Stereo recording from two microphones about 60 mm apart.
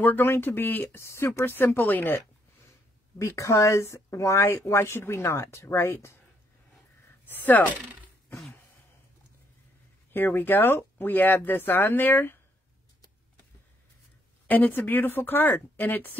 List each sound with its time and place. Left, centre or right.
0.0 s speech: left
1.0 s speech: left
1.4 s speech: left
3.2 s speech: left
7.2 s speech: left
10.1 s speech: left
14.5 s speech: left